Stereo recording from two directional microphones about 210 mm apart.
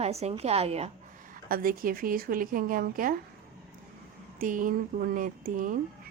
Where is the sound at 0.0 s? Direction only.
30° right (ahead or behind).